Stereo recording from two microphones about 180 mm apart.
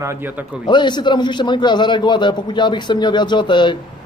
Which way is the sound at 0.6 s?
25° left (ahead or behind).